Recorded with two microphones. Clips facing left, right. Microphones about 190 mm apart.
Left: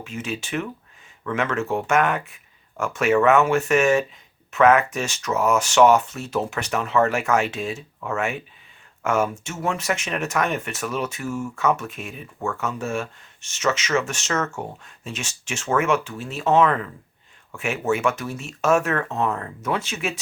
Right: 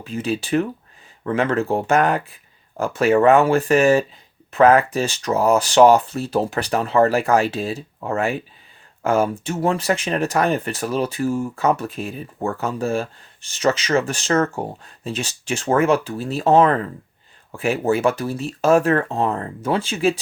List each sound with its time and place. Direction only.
0.0 s speech: 35° right (ahead or behind)